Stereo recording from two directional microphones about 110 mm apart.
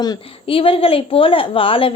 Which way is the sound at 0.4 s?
55° left (ahead or behind).